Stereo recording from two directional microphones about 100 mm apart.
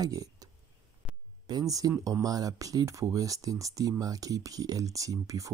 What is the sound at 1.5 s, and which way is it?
Speech, 40° right (ahead or behind).